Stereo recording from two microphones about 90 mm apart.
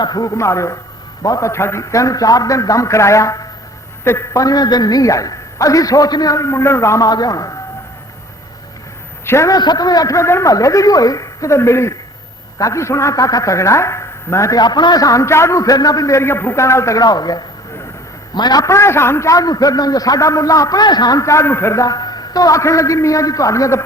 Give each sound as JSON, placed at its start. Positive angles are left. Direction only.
{"t": 0.0, "sound": "a man's voice", "side_deg": 45}
{"t": 7.0, "sound": "a man's voice", "side_deg": 45}
{"t": 9.2, "sound": "a man's voice", "side_deg": 30}
{"t": 9.5, "sound": "a man's voice", "side_deg": 50}
{"t": 14.6, "sound": "a man's voice", "side_deg": 50}
{"t": 17.0, "sound": "a man's voice", "side_deg": 45}
{"t": 18.6, "sound": "a man's voice", "side_deg": 30}
{"t": 21.2, "sound": "a man's voice", "side_deg": 35}
{"t": 21.8, "sound": "a man's voice", "side_deg": 45}